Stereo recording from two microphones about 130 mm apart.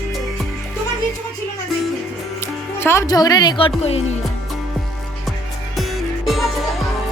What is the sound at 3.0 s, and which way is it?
Speech, 30° left (ahead or behind).